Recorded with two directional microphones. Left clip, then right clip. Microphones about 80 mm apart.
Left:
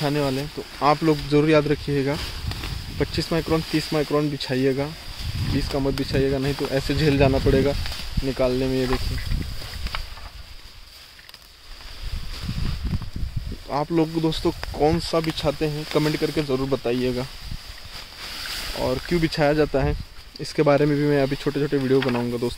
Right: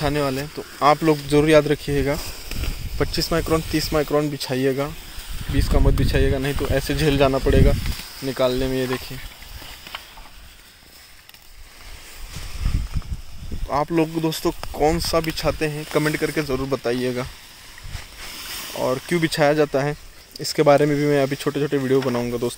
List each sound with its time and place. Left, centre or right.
0.0 s speech: centre
5.5 s speech: centre
13.7 s speech: centre
14.1 s speech: left
15.7 s speech: centre
16.1 s speech: centre
18.7 s speech: centre